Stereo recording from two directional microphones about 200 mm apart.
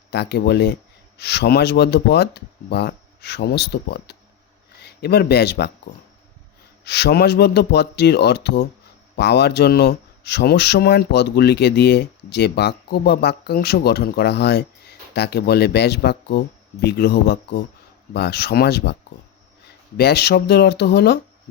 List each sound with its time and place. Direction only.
0.1 s speech: 55° left (ahead or behind)
6.8 s speech: 55° left (ahead or behind)
20.0 s speech: 55° left (ahead or behind)